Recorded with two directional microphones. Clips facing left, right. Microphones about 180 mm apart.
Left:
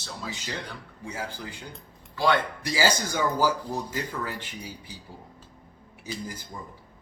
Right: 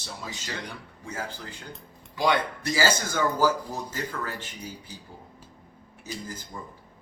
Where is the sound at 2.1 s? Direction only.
15° right (ahead or behind).